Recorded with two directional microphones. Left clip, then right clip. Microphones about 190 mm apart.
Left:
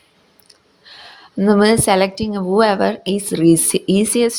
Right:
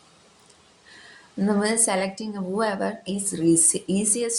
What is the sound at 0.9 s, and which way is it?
A woman's voice, 45° left (ahead or behind).